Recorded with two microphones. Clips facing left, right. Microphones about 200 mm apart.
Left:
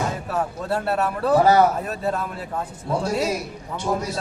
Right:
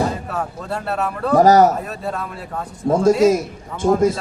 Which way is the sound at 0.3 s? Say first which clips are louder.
Left 1 dB; 5° left (ahead or behind).